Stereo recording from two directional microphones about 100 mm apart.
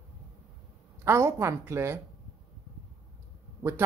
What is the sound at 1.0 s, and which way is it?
A woman's voice, 25° right (ahead or behind).